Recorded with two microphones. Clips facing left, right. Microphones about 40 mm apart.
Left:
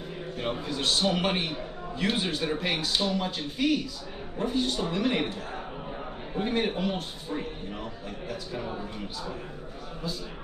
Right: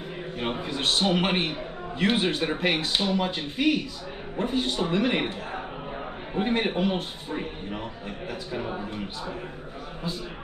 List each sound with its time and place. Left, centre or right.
0.4 s a man's voice: right